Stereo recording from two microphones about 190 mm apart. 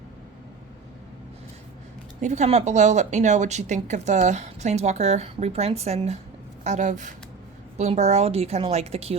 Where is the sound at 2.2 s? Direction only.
35° right (ahead or behind).